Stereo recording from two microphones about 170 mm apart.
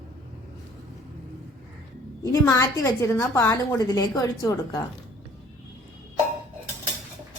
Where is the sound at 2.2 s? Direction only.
20° left (ahead or behind).